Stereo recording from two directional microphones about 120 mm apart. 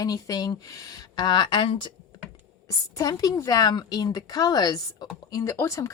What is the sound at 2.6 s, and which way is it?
Speech, 30° left (ahead or behind).